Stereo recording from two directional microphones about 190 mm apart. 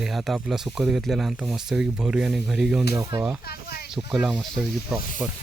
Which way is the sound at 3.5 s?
55° left (ahead or behind).